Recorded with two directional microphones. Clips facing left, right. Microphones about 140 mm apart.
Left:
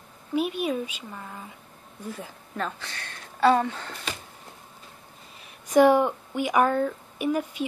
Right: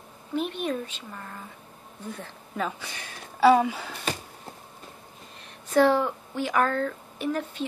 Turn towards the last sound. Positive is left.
turn(degrees=10)  # may be behind; listen again after turning